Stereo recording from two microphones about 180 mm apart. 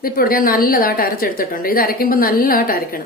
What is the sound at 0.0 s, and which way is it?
A woman's voice, 55° left (ahead or behind).